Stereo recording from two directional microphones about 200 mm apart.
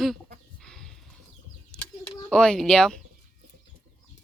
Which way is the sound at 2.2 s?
5° left (ahead or behind).